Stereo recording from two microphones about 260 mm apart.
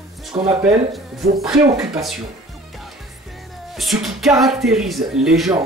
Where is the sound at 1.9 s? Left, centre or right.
Centre.